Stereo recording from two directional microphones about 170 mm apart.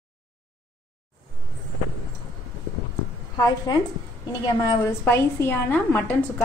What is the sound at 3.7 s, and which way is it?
A woman's voice, 20° left (ahead or behind).